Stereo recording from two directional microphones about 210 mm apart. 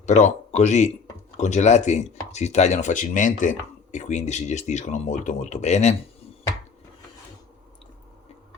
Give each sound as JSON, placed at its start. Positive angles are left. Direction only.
{"t": 0.0, "sound": "speech", "side_deg": 35}